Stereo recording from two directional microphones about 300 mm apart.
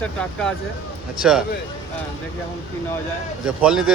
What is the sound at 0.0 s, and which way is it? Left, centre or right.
Speech, centre.